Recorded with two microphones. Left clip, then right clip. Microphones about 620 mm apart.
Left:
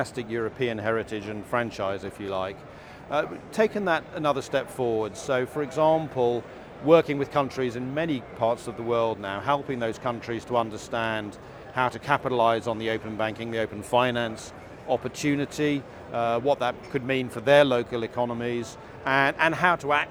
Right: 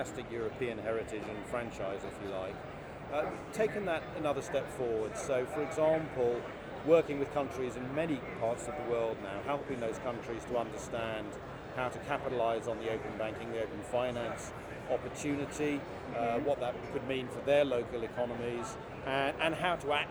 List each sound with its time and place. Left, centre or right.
0.0 s speech: left
3.1 s speech: left
16.2 s speech: left